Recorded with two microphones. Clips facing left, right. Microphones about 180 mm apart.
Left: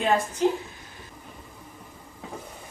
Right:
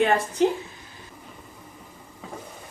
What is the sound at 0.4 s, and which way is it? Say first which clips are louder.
Speech: right 3 dB; 70° right (ahead or behind).